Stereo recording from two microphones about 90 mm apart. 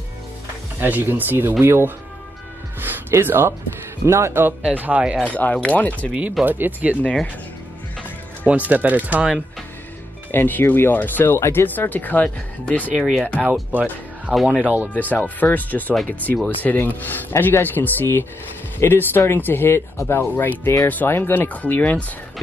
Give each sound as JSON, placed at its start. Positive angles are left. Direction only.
{"t": 0.7, "sound": "speech", "side_deg": -20}
{"t": 2.8, "sound": "music", "side_deg": -25}
{"t": 4.0, "sound": "speech", "side_deg": -30}
{"t": 5.2, "sound": "speech", "side_deg": 15}
{"t": 6.4, "sound": "speech", "side_deg": -20}
{"t": 7.0, "sound": "speech", "side_deg": 15}
{"t": 8.5, "sound": "speech", "side_deg": -15}
{"t": 10.3, "sound": "speech", "side_deg": 25}
{"t": 13.4, "sound": "speech", "side_deg": -20}
{"t": 14.3, "sound": "speech", "side_deg": 0}
{"t": 14.6, "sound": "speech", "side_deg": -15}
{"t": 15.0, "sound": "speech", "side_deg": 20}